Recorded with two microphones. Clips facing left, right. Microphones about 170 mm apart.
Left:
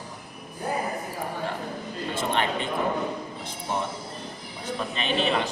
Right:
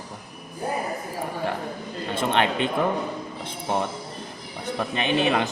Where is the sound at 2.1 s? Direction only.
65° right (ahead or behind).